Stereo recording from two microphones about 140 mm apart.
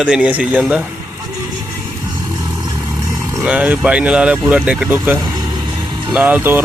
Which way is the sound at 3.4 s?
10° right (ahead or behind).